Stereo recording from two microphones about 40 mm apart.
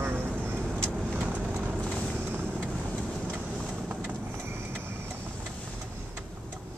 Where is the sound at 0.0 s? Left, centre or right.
Right.